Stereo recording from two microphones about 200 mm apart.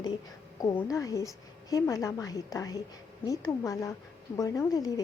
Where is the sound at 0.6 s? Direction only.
15° left (ahead or behind).